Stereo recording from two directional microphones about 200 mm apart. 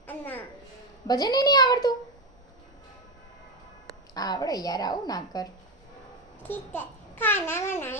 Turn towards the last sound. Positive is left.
turn(degrees=10)  # may be behind; listen again after turning